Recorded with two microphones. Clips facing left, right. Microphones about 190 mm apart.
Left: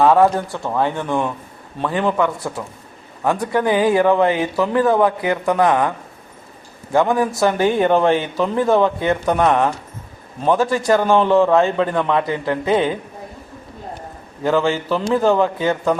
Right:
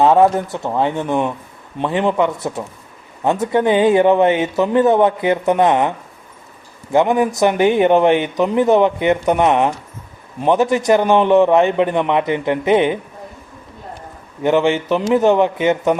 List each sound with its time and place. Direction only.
0.0 s a man's voice: 20° right (ahead or behind)
6.9 s a man's voice: 20° right (ahead or behind)
14.4 s a man's voice: 20° right (ahead or behind)